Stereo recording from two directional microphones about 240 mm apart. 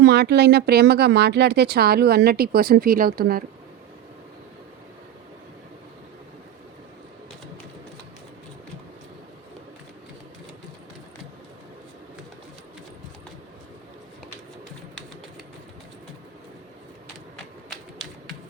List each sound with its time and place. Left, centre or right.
0.0 s speech: right
17.7 s typewriter: centre